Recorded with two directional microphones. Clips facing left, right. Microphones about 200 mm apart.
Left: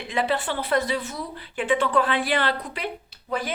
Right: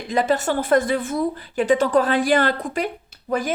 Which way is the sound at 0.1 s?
45° right (ahead or behind).